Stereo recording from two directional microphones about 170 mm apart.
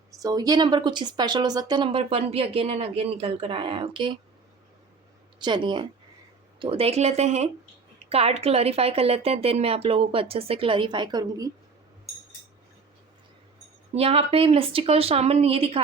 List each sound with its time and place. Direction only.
0.1 s speech: 20° right (ahead or behind)
5.4 s a woman's voice: 25° right (ahead or behind)
13.9 s a woman's voice: 35° right (ahead or behind)